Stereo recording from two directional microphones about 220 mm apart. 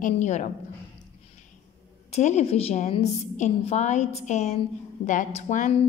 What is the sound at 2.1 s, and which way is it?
A woman's voice, 30° left (ahead or behind).